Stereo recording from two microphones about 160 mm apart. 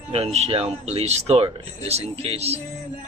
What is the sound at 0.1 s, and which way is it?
Speech, 40° right (ahead or behind).